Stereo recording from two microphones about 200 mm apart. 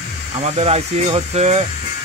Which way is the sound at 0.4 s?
30° right (ahead or behind).